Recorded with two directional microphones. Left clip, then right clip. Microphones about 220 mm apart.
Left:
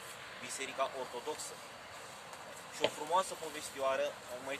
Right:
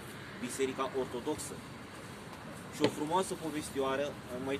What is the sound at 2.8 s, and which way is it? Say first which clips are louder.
Speech: right 3 dB; 25° right (ahead or behind).